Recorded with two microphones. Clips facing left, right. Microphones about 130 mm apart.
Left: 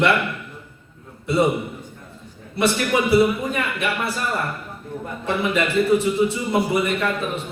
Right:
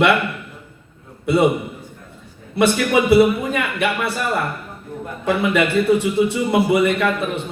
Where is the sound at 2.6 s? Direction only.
65° right (ahead or behind).